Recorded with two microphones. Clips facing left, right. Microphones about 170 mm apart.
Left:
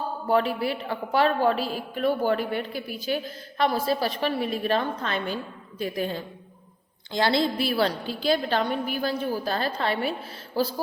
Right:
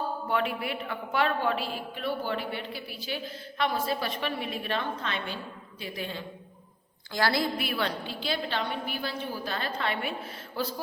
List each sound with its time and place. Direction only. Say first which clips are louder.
0.3 s a woman's voice: left 8 dB; 35° left (ahead or behind)
7.1 s a woman's voice: left 4 dB; 20° left (ahead or behind)